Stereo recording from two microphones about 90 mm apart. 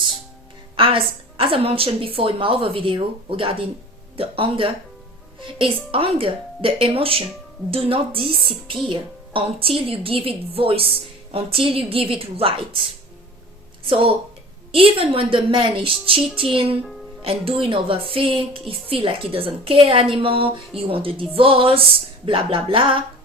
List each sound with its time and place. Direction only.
0.8 s a woman's voice: 90° right
13.8 s a woman's voice: 90° right